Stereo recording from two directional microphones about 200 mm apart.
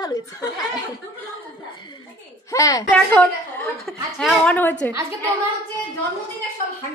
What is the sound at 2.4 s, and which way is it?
Speech, 15° left (ahead or behind).